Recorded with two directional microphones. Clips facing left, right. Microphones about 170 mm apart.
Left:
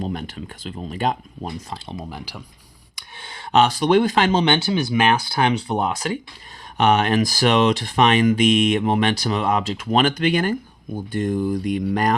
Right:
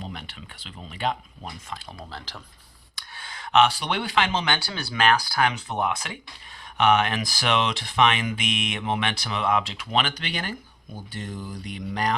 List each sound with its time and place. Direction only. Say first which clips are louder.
0.0 s speech: left 10 dB; 45° left (ahead or behind)
1.9 s speech: left 7 dB; 15° left (ahead or behind)
2.9 s speech: left 2 dB; 25° left (ahead or behind)
4.4 s speech: left 9 dB; 25° left (ahead or behind); by 12.1 s 50° left (ahead or behind)